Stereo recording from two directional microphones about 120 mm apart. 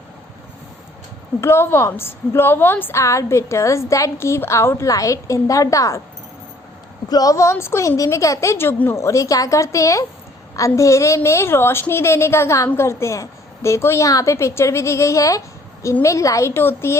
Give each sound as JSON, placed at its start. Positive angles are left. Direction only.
{"t": 1.4, "sound": "a woman's voice", "side_deg": 20}
{"t": 7.1, "sound": "a woman's voice", "side_deg": 30}